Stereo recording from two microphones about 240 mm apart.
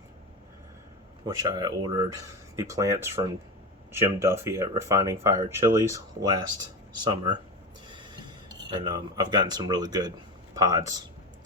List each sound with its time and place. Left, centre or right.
1.2 s speech: centre
7.9 s a sound: centre
8.7 s speech: centre